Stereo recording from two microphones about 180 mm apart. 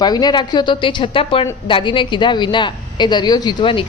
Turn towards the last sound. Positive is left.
turn(degrees=25)  # may be behind; listen again after turning